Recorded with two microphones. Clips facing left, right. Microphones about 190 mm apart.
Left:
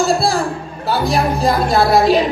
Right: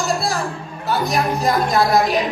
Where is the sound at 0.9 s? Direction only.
30° left (ahead or behind).